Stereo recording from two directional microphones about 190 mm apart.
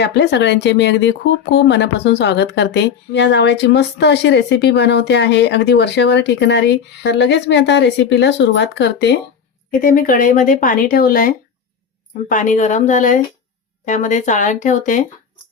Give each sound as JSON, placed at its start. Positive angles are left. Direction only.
{"t": 0.0, "sound": "speech", "side_deg": 65}
{"t": 9.8, "sound": "speech", "side_deg": 45}